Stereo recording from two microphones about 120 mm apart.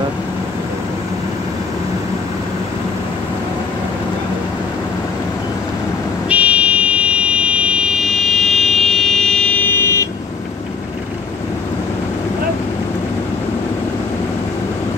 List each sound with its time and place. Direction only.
6.2 s buzzer: 10° right (ahead or behind); by 10.0 s 20° left (ahead or behind)